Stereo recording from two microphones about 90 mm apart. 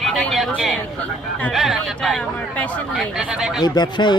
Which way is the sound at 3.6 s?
50° left (ahead or behind).